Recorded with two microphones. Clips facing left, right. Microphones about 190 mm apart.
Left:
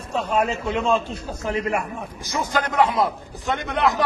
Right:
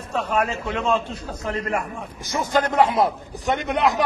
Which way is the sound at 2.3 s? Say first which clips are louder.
Right 3 dB; 20° right (ahead or behind).